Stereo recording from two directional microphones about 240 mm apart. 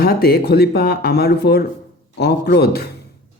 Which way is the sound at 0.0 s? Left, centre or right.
Left.